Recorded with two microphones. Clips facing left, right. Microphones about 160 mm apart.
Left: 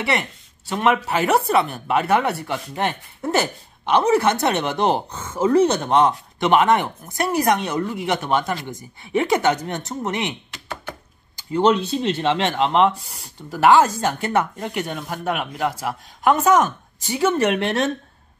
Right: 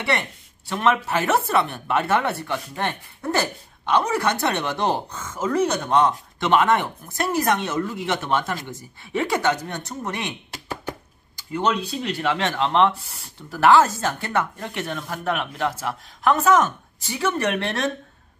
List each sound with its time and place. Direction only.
0.7 s speech: 20° left (ahead or behind)
11.5 s speech: 30° left (ahead or behind)